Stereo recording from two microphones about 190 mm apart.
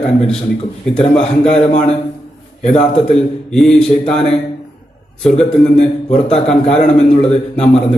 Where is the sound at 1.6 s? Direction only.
35° left (ahead or behind).